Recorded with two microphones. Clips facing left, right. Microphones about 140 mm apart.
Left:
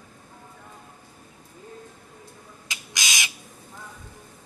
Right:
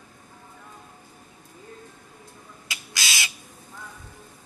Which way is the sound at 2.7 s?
20° left (ahead or behind).